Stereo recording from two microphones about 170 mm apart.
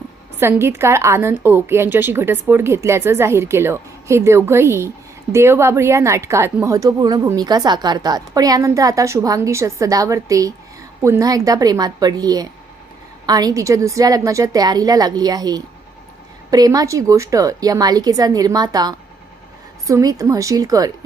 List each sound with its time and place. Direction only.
0.3 s a woman's voice: 15° right (ahead or behind)